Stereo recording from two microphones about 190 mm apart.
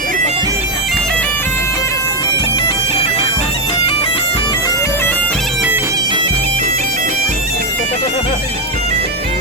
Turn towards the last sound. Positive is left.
turn(degrees=-40)  # may be behind; listen again after turning